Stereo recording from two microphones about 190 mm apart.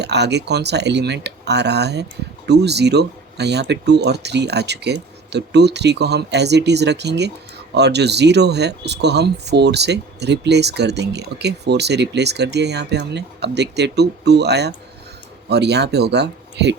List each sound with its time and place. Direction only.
0.0 s speech: 60° right (ahead or behind)